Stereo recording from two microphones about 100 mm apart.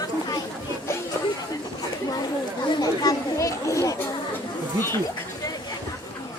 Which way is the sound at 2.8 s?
35° left (ahead or behind).